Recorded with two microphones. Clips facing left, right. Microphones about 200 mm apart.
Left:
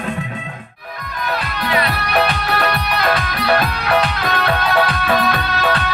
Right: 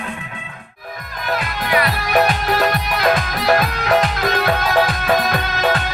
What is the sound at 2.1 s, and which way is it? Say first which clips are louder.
Music: right 2 dB; 45° right (ahead or behind).